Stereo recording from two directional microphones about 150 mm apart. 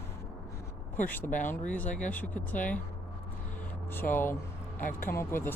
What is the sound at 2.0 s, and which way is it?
Speech, 10° left (ahead or behind).